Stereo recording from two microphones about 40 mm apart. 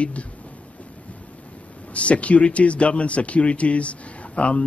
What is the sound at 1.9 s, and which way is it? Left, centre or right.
A man's voice, left.